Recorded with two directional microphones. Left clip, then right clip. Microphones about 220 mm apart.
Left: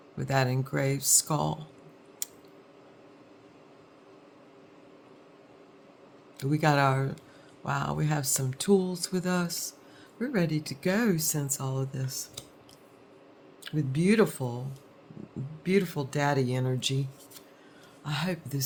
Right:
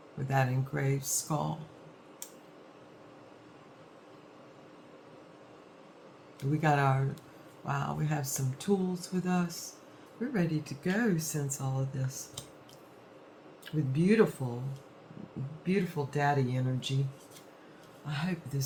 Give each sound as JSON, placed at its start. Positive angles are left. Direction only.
{"t": 0.3, "sound": "speech", "side_deg": 50}
{"t": 6.5, "sound": "speech", "side_deg": 50}
{"t": 13.7, "sound": "speech", "side_deg": 50}
{"t": 15.6, "sound": "speech", "side_deg": 50}
{"t": 18.0, "sound": "speech", "side_deg": 50}